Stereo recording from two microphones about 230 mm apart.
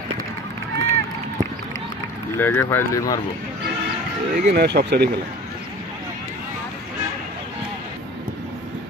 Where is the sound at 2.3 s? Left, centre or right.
Centre.